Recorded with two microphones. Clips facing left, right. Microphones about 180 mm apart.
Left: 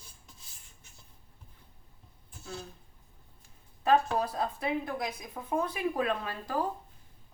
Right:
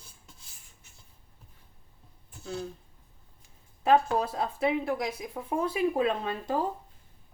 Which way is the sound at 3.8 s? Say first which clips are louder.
Right 2 dB; 25° right (ahead or behind).